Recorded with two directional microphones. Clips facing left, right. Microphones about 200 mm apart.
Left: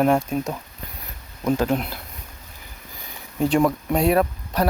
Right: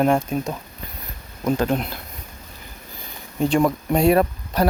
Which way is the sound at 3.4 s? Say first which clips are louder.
Even; 5° left (ahead or behind).